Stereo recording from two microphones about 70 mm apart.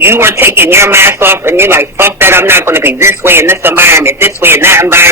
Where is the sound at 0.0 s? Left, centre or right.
Right.